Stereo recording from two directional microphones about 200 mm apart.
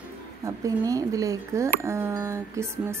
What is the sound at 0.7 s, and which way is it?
Speech, 15° right (ahead or behind).